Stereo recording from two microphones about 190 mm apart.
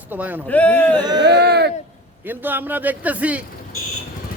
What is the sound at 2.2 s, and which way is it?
Speech, 10° right (ahead or behind).